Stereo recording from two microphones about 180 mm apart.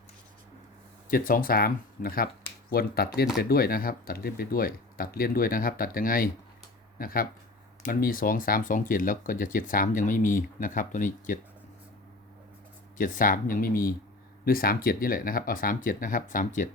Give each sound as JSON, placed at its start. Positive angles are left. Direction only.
{"t": 1.1, "sound": "speech", "side_deg": 50}
{"t": 13.0, "sound": "speech", "side_deg": 45}